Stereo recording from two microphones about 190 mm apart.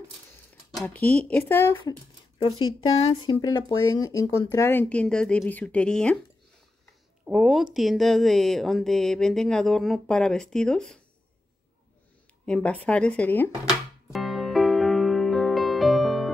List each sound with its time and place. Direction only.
0.7 s speech: 10° left (ahead or behind)
1.8 s a sound: 25° left (ahead or behind)
3.3 s speech: 25° left (ahead or behind); by 6.1 s 5° left (ahead or behind)
7.2 s speech: 5° right (ahead or behind)
12.4 s music: 5° left (ahead or behind)